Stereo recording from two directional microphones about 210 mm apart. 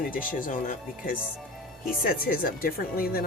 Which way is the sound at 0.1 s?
40° left (ahead or behind).